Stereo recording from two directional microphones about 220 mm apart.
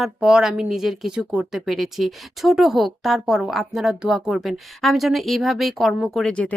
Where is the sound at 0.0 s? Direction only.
5° right (ahead or behind).